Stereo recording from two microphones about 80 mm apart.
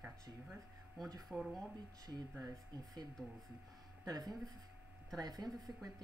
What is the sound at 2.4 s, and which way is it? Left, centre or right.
Speech, right.